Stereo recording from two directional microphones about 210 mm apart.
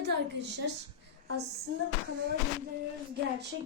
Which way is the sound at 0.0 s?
55° right (ahead or behind).